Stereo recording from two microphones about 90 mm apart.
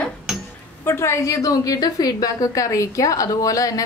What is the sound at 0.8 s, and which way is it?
A woman's voice, 30° left (ahead or behind).